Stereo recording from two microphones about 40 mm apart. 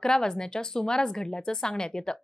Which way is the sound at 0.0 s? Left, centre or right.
Centre.